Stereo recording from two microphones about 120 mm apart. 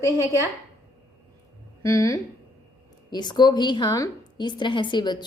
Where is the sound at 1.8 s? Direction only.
25° left (ahead or behind).